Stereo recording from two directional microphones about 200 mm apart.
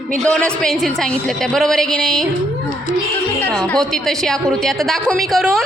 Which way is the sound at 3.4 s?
5° left (ahead or behind).